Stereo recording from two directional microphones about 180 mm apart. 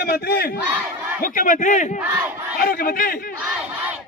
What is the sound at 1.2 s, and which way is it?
A man's voice, 50° left (ahead or behind).